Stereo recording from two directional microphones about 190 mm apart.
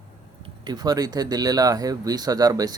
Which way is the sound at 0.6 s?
20° right (ahead or behind).